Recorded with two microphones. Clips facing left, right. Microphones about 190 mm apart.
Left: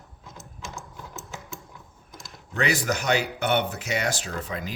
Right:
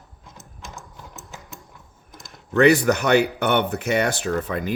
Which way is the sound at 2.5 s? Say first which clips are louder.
Right 10 dB; 60° right (ahead or behind).